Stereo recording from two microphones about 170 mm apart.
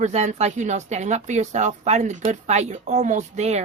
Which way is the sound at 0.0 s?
45° right (ahead or behind).